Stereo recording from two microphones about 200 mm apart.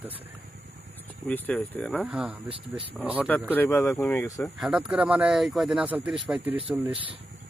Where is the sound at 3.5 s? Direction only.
10° left (ahead or behind).